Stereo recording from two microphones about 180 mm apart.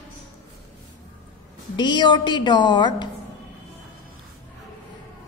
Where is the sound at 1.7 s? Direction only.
25° left (ahead or behind).